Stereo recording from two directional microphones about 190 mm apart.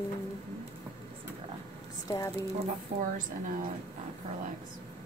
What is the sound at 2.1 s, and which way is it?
Speech, 20° left (ahead or behind).